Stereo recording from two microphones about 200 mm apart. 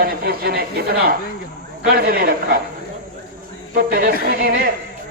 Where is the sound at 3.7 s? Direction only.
45° right (ahead or behind).